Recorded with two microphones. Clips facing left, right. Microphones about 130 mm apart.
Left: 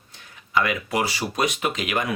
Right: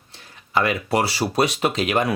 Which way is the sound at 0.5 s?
35° right (ahead or behind).